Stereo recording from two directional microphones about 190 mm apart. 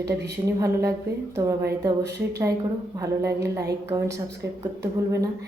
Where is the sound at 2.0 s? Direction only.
60° right (ahead or behind).